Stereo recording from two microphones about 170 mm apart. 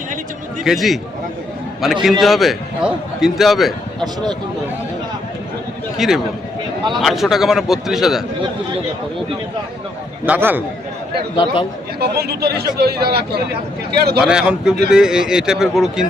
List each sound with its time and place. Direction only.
0.6 s a man's voice: centre (ahead or behind)
4.0 s speech: 25° right (ahead or behind)
6.0 s a man's voice: centre (ahead or behind)
10.2 s a man's voice: 10° right (ahead or behind)
11.9 s speech: 70° right (ahead or behind)
14.2 s a man's voice: 5° right (ahead or behind)